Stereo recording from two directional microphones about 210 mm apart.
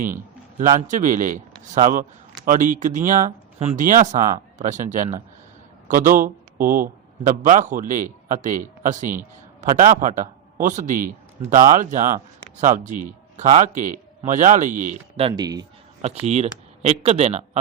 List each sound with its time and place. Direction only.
0.8 s a man's voice: 35° right (ahead or behind); by 15.6 s 20° right (ahead or behind)
16.2 s speech: 30° right (ahead or behind)